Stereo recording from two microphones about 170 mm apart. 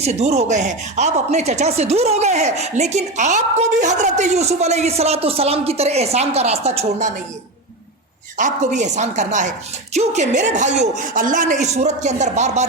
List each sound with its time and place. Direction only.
0.0 s speech: 40° right (ahead or behind)
8.4 s speech: 45° right (ahead or behind)